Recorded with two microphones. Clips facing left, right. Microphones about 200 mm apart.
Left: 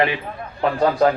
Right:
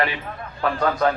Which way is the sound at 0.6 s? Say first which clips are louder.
Left 4 dB; 25° left (ahead or behind).